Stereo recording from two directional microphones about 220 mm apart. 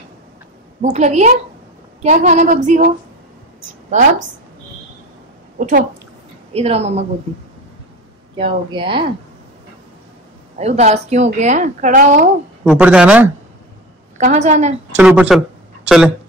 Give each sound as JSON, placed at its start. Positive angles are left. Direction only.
{"t": 0.9, "sound": "a woman's voice", "side_deg": -30}
{"t": 5.6, "sound": "a woman's voice", "side_deg": -35}
{"t": 8.4, "sound": "speech", "side_deg": -25}
{"t": 10.6, "sound": "a woman's voice", "side_deg": -30}
{"t": 12.6, "sound": "speech", "side_deg": -5}
{"t": 14.1, "sound": "a woman's voice", "side_deg": -30}
{"t": 15.0, "sound": "speech", "side_deg": -5}